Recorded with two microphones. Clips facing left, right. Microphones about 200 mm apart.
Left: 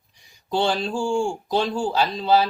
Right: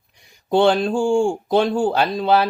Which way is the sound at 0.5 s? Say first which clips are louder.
Right 7 dB; 55° right (ahead or behind).